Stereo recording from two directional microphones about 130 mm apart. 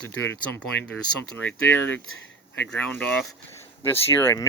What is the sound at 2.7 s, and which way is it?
Speech, 10° left (ahead or behind).